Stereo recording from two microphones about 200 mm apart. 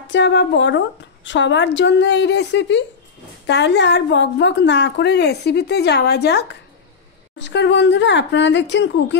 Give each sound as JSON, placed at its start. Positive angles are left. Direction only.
{"t": 0.1, "sound": "a woman's voice", "side_deg": 60}